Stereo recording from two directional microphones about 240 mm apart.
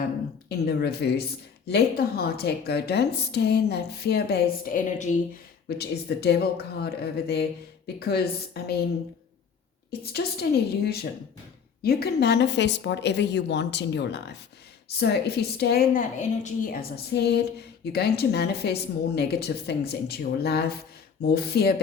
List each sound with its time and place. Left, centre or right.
0.4 s a woman's voice: left
10.0 s a woman's voice: left